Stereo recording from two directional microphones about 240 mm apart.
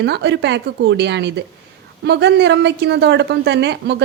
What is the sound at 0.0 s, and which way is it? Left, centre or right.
A woman's voice, right.